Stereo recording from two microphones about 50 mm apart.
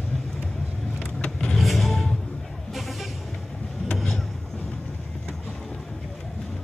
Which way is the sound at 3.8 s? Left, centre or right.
Left.